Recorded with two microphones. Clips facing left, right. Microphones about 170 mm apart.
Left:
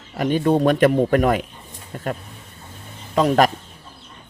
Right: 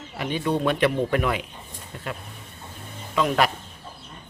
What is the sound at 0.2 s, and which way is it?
Speech, 45° left (ahead or behind).